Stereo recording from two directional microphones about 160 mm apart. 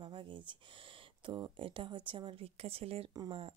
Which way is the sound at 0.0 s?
30° right (ahead or behind).